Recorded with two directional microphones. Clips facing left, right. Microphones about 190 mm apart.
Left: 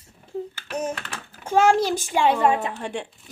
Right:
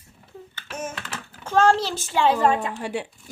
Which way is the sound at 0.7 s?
35° left (ahead or behind).